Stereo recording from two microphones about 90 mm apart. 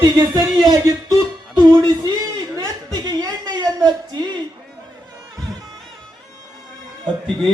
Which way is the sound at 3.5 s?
50° right (ahead or behind).